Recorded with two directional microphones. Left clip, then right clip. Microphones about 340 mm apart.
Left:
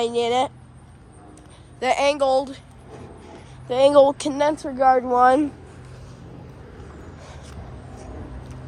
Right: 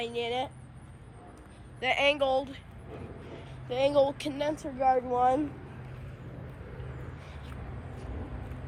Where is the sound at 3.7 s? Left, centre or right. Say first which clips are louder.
Left 11 dB; left.